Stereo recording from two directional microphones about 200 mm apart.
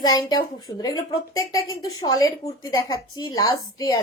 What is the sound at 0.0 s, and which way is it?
A woman's voice, 20° left (ahead or behind).